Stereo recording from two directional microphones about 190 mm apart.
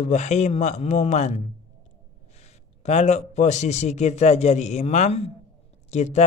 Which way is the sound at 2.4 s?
35° left (ahead or behind).